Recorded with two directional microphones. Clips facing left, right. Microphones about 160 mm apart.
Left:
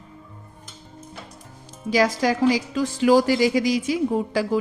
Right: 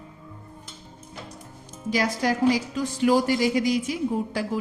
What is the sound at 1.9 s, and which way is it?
Speech, 90° left.